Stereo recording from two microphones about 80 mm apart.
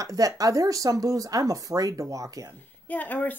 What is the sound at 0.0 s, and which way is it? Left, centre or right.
Speech, right.